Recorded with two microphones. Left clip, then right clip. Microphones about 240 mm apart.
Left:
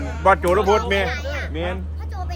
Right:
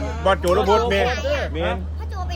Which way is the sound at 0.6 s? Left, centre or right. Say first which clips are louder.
Right 1 dB; centre.